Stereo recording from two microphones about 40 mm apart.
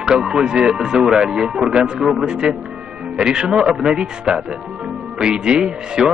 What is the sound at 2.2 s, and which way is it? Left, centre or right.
Speech, right.